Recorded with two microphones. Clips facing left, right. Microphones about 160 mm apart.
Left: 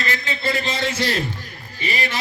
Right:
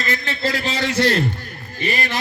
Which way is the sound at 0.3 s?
80° right.